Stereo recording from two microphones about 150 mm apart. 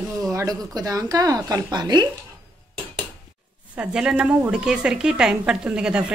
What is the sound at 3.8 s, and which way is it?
A woman's voice, 5° right (ahead or behind).